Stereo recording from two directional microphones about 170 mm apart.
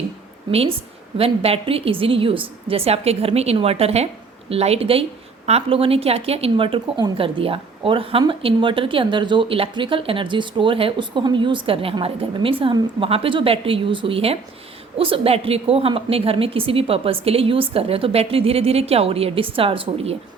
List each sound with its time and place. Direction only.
0.5 s a woman's voice: 35° right (ahead or behind)